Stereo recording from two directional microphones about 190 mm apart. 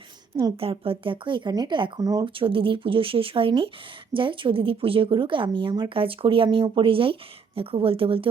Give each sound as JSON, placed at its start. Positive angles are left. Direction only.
{"t": 0.5, "sound": "speech", "side_deg": -30}